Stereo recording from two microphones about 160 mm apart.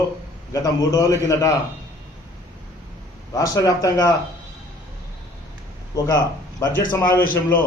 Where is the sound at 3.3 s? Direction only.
20° left (ahead or behind).